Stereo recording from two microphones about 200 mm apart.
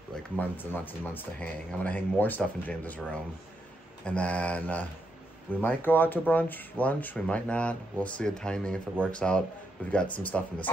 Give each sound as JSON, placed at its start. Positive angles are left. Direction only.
{"t": 0.4, "sound": "speech", "side_deg": 10}
{"t": 4.0, "sound": "speech", "side_deg": 5}